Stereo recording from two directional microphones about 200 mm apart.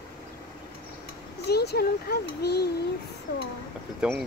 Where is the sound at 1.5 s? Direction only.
55° left (ahead or behind).